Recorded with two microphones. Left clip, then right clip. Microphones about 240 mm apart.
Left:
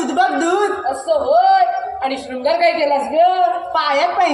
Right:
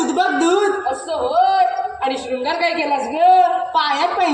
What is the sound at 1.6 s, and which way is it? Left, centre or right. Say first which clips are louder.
A woman's voice: left 1 dB; left.